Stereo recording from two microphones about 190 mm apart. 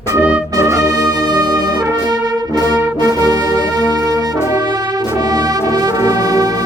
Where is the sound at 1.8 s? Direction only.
20° right (ahead or behind).